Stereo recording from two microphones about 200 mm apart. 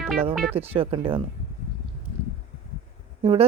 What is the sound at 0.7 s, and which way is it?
Speech, 30° right (ahead or behind).